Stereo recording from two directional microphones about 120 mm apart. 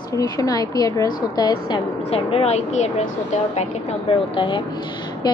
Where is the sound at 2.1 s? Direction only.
55° left (ahead or behind).